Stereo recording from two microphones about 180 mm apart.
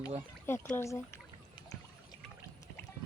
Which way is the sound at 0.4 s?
15° left (ahead or behind).